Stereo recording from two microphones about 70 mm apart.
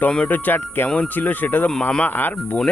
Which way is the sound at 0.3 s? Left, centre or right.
Left.